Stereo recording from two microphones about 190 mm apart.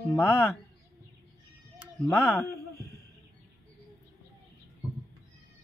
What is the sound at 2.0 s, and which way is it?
Speech, 15° left (ahead or behind).